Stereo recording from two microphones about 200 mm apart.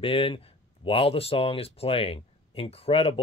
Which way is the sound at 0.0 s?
25° left (ahead or behind).